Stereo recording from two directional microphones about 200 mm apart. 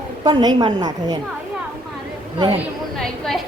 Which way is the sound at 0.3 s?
20° right (ahead or behind).